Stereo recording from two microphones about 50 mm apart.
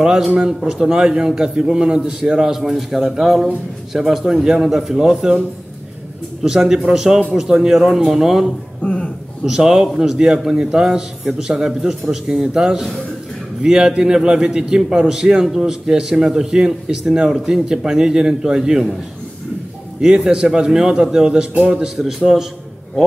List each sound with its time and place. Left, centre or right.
0.0 s a man's voice: centre
6.4 s a man's voice: centre
8.8 s a sound: left
9.4 s a man's voice: centre
20.0 s a man's voice: centre